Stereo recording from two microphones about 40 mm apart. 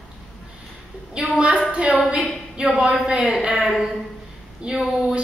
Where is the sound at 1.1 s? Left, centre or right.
Right.